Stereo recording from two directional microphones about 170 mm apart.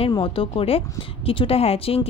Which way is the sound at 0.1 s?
30° left (ahead or behind).